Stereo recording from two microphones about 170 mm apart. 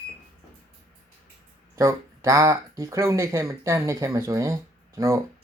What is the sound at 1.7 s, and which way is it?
Speech, 15° right (ahead or behind).